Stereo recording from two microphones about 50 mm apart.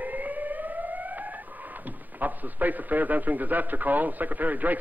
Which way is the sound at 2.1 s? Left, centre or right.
Right.